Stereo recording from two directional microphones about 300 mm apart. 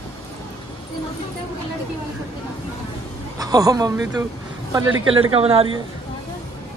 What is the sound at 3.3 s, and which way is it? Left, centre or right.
Speech, centre.